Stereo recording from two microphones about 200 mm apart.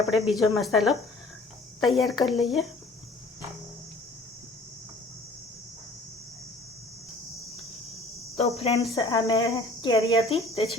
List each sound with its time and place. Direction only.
0.1 s speech: centre (ahead or behind)
8.4 s cricket: 30° left (ahead or behind)
9.0 s a woman's voice: 20° left (ahead or behind)
10.2 s a woman's voice: 30° left (ahead or behind)